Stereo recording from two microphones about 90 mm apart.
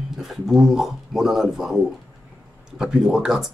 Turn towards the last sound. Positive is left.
turn(degrees=-5)  # may be behind; listen again after turning